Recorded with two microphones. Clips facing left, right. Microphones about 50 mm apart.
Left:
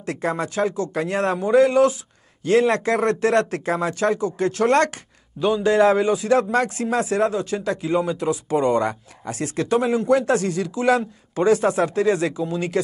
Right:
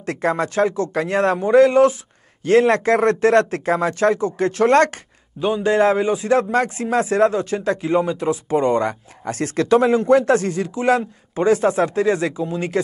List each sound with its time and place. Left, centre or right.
0.0 s a man's voice: right